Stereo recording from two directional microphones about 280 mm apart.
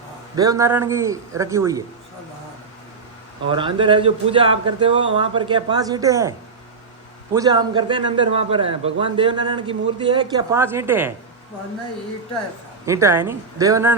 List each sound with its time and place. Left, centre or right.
0.3 s a man's voice: centre
3.4 s a man's voice: centre
7.3 s a man's voice: centre
12.8 s a man's voice: centre